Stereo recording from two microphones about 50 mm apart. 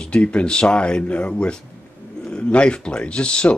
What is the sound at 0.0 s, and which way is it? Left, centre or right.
A man's voice, left.